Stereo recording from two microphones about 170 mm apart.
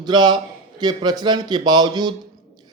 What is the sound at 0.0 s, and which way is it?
A man's voice, 25° right (ahead or behind).